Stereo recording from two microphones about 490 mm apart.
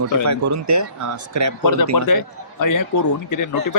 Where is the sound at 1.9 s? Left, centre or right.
Left.